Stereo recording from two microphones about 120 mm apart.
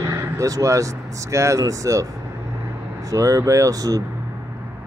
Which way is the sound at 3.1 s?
25° right (ahead or behind).